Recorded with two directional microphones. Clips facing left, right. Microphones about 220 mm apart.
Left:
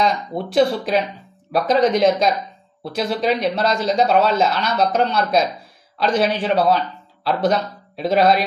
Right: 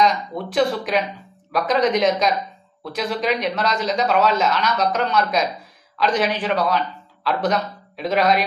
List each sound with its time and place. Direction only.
0.0 s a man's voice: 25° left (ahead or behind)